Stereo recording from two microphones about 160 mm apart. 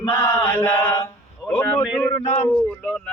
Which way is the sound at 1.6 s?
10° left (ahead or behind).